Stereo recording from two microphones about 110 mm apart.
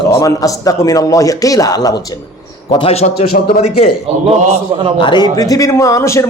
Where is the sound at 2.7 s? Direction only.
65° left (ahead or behind).